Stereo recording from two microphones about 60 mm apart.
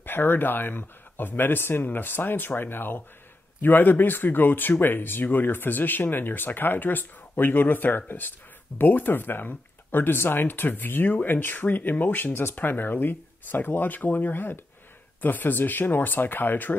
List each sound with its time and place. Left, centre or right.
0.0 s speech: left